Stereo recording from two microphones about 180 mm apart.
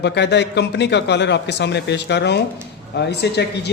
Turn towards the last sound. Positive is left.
turn(degrees=70)  # may be behind; listen again after turning